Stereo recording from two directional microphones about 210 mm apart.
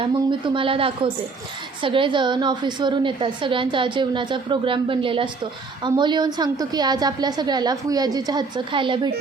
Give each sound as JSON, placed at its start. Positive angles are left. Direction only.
{"t": 0.0, "sound": "a woman's voice", "side_deg": -25}